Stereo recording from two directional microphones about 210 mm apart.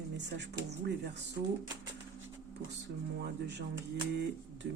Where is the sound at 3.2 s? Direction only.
55° right (ahead or behind).